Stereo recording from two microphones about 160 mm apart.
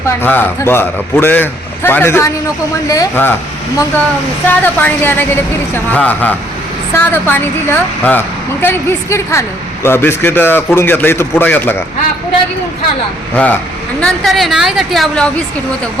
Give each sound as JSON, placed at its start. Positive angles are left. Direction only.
{"t": 0.2, "sound": "a man's voice", "side_deg": 15}
{"t": 4.4, "sound": "a man's voice", "side_deg": 10}
{"t": 13.3, "sound": "a man's voice", "side_deg": 10}